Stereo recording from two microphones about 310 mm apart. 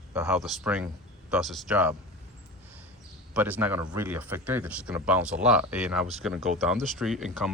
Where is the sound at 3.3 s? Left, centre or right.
Centre.